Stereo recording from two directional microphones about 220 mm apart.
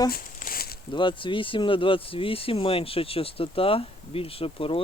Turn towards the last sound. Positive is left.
turn(degrees=25)  # may be behind; listen again after turning